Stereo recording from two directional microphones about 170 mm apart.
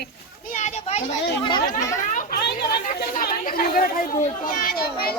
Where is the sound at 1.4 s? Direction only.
25° left (ahead or behind).